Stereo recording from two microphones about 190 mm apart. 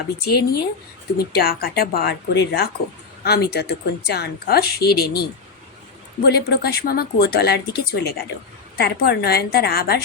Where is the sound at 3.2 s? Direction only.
55° left (ahead or behind).